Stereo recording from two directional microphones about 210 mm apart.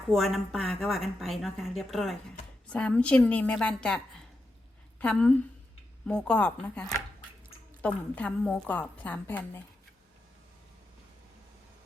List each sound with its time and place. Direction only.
0.1 s a woman's voice: centre (ahead or behind)